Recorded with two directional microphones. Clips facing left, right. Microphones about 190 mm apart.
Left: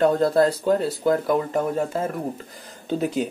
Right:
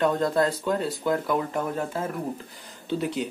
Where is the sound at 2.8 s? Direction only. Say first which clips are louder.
Left 4 dB; 45° left (ahead or behind).